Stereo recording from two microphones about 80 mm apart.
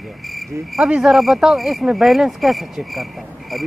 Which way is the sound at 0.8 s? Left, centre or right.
Centre.